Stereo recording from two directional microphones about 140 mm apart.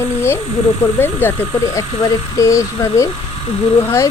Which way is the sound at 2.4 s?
20° left (ahead or behind).